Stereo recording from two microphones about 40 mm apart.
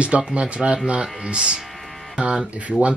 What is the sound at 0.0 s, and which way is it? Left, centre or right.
Speech, right.